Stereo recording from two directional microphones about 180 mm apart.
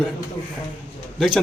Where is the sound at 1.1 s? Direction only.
Centre (ahead or behind).